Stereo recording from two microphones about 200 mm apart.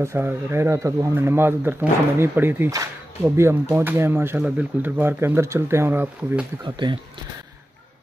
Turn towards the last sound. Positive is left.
turn(degrees=-25)  # may be behind; listen again after turning